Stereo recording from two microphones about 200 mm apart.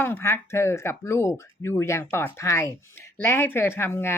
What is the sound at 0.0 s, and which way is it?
Speech, 10° left (ahead or behind).